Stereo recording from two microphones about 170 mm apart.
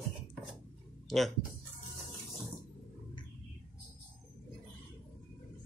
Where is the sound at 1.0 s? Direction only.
Centre (ahead or behind).